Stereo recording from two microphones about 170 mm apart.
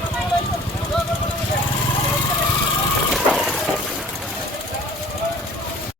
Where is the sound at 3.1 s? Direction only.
Centre (ahead or behind).